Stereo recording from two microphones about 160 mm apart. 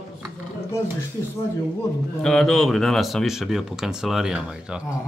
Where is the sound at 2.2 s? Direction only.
5° left (ahead or behind).